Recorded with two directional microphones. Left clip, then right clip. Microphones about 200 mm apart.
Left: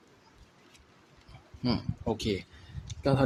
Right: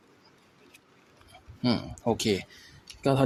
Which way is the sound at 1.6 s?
15° right (ahead or behind).